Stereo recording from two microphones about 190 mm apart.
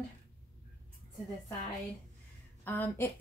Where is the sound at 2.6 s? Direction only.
10° left (ahead or behind).